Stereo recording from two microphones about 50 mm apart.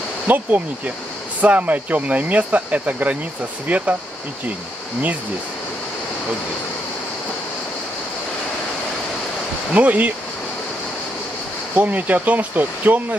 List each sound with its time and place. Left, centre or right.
0.3 s speech: right
9.8 s speech: right
11.7 s speech: right